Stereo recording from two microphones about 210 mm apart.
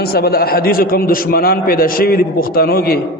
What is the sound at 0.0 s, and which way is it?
A man's voice, 45° left (ahead or behind).